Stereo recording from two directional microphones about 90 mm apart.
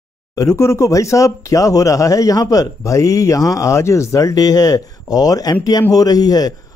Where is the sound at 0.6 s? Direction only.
35° left (ahead or behind).